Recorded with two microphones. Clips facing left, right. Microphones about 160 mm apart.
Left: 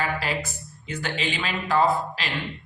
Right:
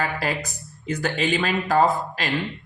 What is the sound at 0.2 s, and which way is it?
Speech, 45° right (ahead or behind).